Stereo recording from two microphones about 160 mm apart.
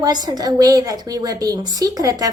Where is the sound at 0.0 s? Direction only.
25° right (ahead or behind).